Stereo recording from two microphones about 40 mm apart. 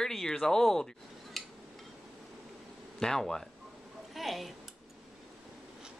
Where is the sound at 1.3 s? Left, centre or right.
Centre.